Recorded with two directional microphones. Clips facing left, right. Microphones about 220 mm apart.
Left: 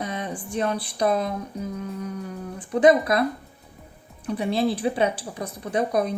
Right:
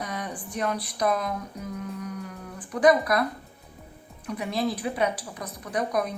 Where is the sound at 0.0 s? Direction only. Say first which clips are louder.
Left 4 dB; 25° left (ahead or behind).